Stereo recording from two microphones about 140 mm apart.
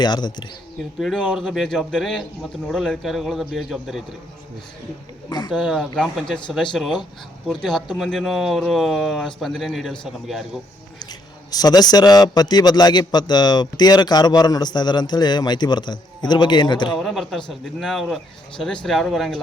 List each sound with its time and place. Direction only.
0.0 s speech: 30° left (ahead or behind)
0.9 s speech: centre (ahead or behind)
5.3 s a man's voice: 30° left (ahead or behind)
5.5 s speech: centre (ahead or behind)
11.0 s a man's voice: 30° left (ahead or behind)
17.0 s speech: centre (ahead or behind)